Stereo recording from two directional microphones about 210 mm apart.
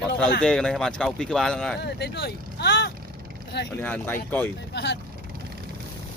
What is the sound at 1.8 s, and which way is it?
Speech, 50° left (ahead or behind).